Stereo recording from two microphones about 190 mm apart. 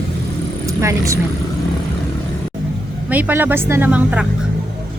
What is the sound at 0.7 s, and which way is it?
Speech, 15° right (ahead or behind).